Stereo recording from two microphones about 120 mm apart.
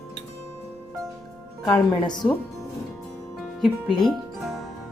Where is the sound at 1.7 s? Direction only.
35° left (ahead or behind).